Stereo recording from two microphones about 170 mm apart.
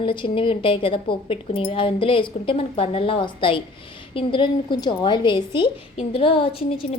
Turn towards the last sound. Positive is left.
turn(degrees=35)  # may be behind; listen again after turning